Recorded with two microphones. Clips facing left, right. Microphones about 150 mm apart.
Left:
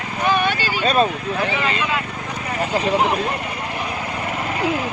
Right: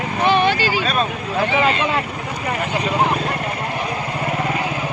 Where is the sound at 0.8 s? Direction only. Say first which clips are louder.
Left 4 dB; 35° left (ahead or behind).